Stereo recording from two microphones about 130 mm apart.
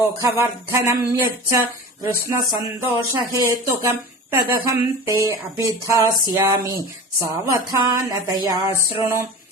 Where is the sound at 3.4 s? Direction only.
20° right (ahead or behind).